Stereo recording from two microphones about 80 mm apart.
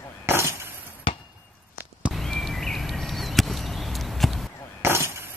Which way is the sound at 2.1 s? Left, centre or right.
Centre.